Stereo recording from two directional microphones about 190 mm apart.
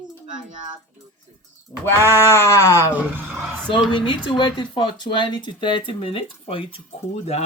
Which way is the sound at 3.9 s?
25° left (ahead or behind).